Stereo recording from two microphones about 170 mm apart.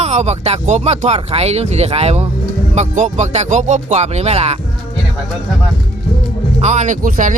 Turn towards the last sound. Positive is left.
turn(degrees=-45)  # may be behind; listen again after turning